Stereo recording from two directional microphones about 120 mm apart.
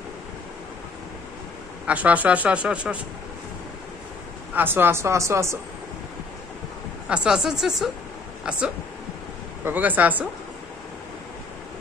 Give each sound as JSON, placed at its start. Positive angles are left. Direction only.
{"t": 1.9, "sound": "speech", "side_deg": -10}
{"t": 4.6, "sound": "a woman's voice", "side_deg": -15}
{"t": 7.1, "sound": "a woman's voice", "side_deg": -5}